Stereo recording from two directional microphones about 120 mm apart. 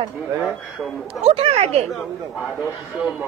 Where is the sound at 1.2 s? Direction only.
55° right (ahead or behind).